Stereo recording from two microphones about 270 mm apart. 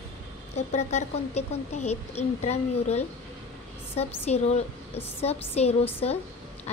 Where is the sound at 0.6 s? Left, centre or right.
Left.